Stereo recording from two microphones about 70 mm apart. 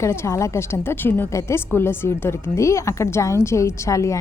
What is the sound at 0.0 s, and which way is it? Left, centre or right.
A woman's voice, left.